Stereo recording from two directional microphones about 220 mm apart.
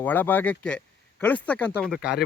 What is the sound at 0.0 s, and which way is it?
Speech, 10° left (ahead or behind).